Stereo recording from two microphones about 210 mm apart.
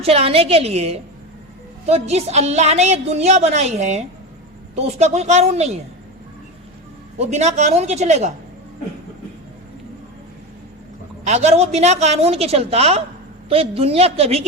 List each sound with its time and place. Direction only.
0.0 s a woman's voice: 30° right (ahead or behind)
7.2 s a woman's voice: 30° right (ahead or behind)
11.2 s a woman's voice: 30° right (ahead or behind)